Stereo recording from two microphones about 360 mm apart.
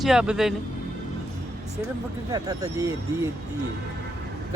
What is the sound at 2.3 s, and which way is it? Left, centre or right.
Speech, centre.